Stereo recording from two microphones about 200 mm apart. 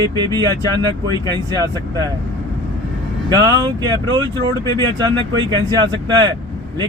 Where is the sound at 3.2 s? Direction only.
20° right (ahead or behind).